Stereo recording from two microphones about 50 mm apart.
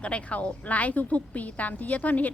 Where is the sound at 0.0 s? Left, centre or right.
Left.